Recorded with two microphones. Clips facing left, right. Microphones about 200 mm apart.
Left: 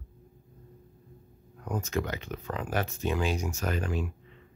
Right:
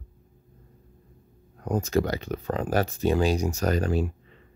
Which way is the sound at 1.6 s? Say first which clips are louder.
Right 7 dB; 35° right (ahead or behind).